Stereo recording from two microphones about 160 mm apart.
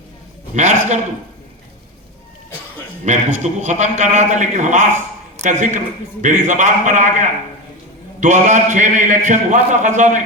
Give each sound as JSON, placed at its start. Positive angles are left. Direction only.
{"t": 0.5, "sound": "a man's voice", "side_deg": -45}
{"t": 3.0, "sound": "a man's voice", "side_deg": -50}